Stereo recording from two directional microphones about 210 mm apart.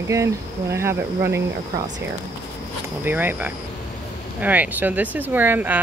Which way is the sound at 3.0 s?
10° right (ahead or behind).